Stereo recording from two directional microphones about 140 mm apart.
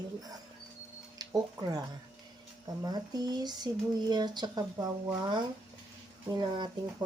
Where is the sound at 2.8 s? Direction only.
30° right (ahead or behind).